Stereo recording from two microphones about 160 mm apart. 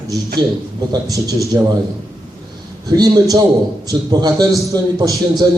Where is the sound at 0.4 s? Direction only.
25° right (ahead or behind).